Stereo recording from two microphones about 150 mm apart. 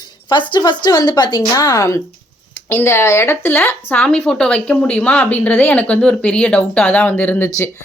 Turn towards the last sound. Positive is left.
turn(degrees=15)  # may be behind; listen again after turning